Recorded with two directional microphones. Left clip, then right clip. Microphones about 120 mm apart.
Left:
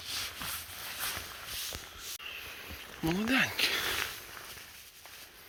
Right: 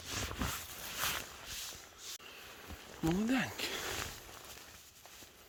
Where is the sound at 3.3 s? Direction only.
35° right (ahead or behind).